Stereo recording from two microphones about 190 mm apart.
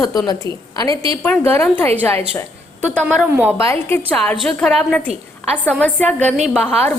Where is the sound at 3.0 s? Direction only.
5° right (ahead or behind).